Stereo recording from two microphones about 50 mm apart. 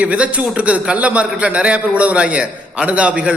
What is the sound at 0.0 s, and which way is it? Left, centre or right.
A man's voice, right.